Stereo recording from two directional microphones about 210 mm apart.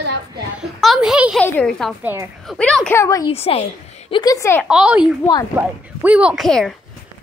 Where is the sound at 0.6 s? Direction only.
Centre (ahead or behind).